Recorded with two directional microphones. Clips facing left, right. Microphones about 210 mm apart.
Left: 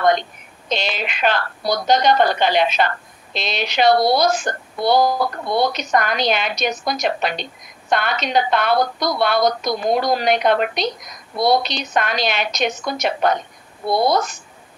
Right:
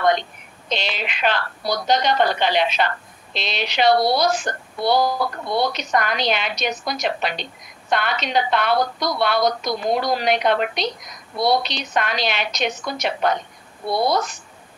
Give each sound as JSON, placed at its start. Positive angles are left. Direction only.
{"t": 0.7, "sound": "a woman's voice", "side_deg": 45}